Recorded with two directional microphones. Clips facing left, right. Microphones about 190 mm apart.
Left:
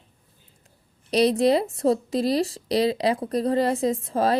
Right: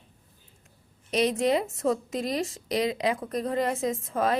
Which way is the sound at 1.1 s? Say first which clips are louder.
Left 5 dB; 35° left (ahead or behind).